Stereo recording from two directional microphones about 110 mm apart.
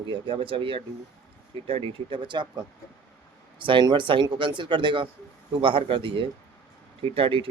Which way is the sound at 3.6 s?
45° right (ahead or behind).